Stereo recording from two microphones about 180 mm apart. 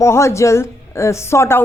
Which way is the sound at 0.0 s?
15° left (ahead or behind).